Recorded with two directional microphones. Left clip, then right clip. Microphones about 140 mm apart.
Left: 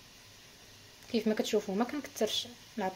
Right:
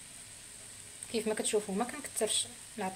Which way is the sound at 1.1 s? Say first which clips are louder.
Left 1 dB; 25° left (ahead or behind).